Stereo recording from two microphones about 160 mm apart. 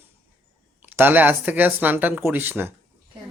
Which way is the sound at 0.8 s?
10° right (ahead or behind).